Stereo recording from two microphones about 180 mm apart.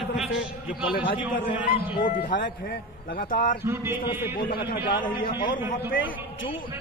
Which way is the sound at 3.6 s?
15° right (ahead or behind).